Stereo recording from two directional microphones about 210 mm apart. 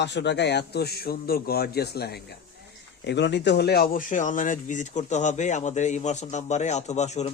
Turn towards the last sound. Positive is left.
turn(degrees=30)  # may be behind; listen again after turning